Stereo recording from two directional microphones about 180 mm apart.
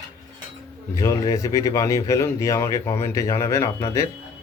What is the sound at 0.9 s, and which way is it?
Speech, 20° left (ahead or behind).